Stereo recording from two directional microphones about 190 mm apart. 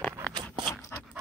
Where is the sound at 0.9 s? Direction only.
15° left (ahead or behind).